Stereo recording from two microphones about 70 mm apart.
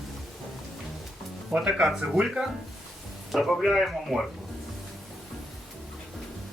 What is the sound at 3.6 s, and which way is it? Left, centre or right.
Speech, centre.